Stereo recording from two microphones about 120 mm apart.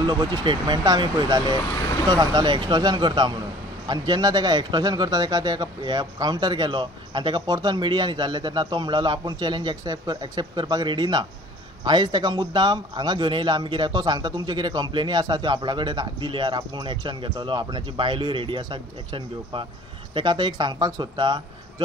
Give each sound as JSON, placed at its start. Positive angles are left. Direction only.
{"t": 0.0, "sound": "a man's voice", "side_deg": -35}
{"t": 1.8, "sound": "boat", "side_deg": 25}
{"t": 2.0, "sound": "a man's voice", "side_deg": -35}